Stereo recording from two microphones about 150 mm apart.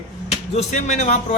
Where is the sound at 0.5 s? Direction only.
50° left (ahead or behind).